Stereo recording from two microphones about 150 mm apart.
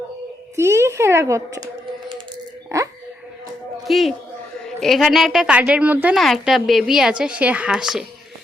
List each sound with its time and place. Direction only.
0.5 s a child's voice: 20° right (ahead or behind)
2.7 s a sound: 20° right (ahead or behind)
3.8 s a man's voice: centre (ahead or behind)
6.1 s speech: centre (ahead or behind)